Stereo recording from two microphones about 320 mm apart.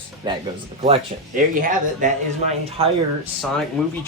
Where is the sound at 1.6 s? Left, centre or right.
Right.